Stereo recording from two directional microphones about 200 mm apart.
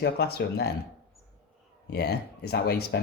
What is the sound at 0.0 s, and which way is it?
Speech, 50° left (ahead or behind).